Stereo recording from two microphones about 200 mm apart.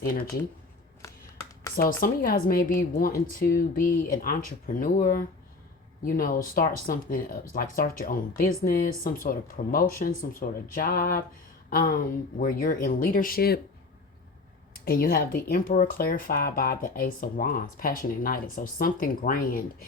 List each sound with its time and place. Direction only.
1.7 s speech: 45° left (ahead or behind)
14.7 s speech: 50° left (ahead or behind)